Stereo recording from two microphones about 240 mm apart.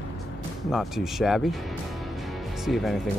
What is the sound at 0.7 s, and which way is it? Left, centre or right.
Speech, centre.